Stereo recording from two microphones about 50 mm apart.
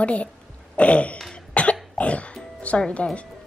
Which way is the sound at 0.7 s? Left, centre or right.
Left.